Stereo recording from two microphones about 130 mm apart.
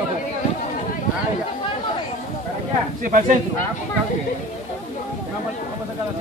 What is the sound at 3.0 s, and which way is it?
Speech, 90° right.